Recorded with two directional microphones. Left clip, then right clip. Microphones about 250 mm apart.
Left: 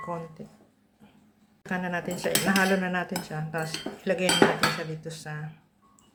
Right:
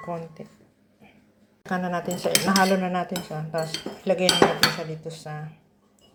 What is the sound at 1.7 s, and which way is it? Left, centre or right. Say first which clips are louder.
A woman's voice: right 3 dB; centre.